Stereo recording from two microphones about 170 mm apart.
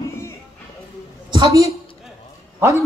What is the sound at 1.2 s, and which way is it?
A woman's voice, 25° right (ahead or behind).